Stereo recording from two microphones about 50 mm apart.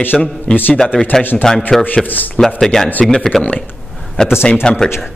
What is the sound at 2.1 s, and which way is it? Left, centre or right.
Speech, left.